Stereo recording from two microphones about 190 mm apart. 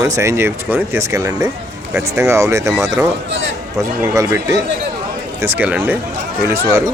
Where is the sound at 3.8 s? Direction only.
15° right (ahead or behind).